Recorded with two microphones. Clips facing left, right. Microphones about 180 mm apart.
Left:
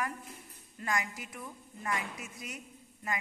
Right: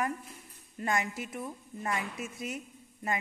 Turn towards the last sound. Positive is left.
turn(degrees=-25)  # may be behind; listen again after turning